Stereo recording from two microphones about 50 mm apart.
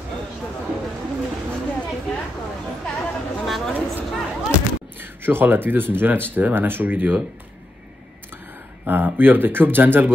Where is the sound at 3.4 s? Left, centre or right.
Centre.